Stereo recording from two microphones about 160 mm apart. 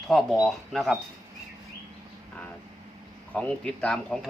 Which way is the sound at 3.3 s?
5° left (ahead or behind).